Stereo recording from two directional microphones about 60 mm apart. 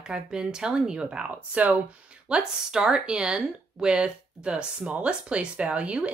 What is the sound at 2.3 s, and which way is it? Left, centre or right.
Speech, centre.